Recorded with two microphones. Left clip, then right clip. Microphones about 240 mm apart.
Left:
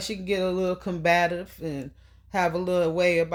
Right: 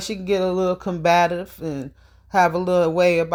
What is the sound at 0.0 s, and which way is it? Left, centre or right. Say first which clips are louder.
Speech: right 5 dB; right.